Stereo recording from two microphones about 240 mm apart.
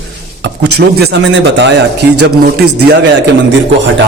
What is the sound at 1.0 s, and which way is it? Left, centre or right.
Speech, right.